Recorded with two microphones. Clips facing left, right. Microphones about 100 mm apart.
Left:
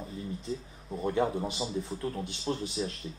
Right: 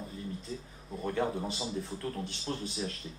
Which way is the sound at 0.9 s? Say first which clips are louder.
Left 3 dB; 15° left (ahead or behind).